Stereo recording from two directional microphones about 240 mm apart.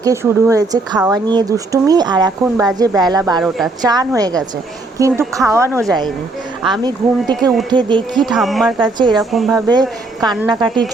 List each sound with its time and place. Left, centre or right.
0.0 s a woman's voice: centre
8.1 s speech: centre
8.8 s speech: centre
9.1 s speech: centre
9.6 s a woman's voice: centre